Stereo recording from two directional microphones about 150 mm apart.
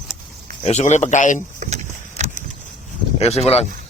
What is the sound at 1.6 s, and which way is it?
Vehicle, 50° right (ahead or behind).